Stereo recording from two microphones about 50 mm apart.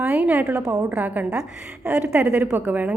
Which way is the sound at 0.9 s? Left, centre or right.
Right.